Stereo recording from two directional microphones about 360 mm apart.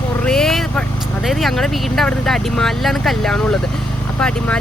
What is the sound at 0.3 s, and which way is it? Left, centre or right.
Speech, centre.